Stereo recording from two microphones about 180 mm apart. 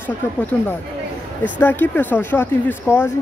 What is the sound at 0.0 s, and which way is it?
Speech, 10° left (ahead or behind).